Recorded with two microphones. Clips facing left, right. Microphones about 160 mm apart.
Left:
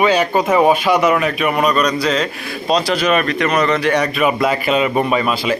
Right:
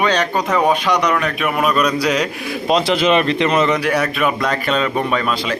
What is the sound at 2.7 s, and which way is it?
Speech, 20° right (ahead or behind).